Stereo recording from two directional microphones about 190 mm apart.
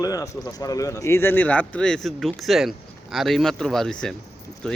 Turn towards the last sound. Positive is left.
turn(degrees=5)  # may be behind; listen again after turning